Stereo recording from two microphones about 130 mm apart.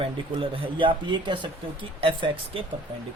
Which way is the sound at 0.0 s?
45° right (ahead or behind).